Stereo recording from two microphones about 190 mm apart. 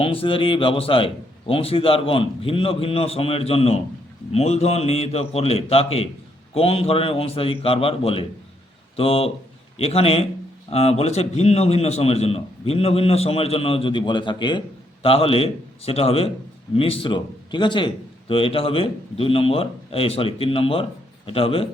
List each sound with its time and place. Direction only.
0.0 s a man's voice: 30° left (ahead or behind)